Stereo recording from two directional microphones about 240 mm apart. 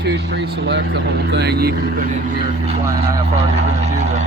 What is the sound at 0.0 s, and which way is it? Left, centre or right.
Speech, right.